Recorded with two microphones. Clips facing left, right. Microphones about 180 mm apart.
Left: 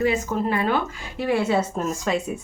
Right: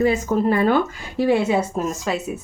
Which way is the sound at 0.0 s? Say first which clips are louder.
Right 4 dB; 40° right (ahead or behind).